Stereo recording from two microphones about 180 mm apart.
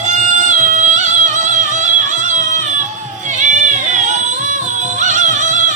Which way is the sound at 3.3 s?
40° right (ahead or behind).